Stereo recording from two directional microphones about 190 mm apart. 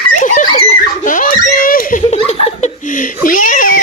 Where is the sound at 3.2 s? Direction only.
45° left (ahead or behind).